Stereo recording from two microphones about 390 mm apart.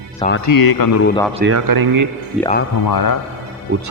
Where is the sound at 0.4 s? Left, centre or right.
Left.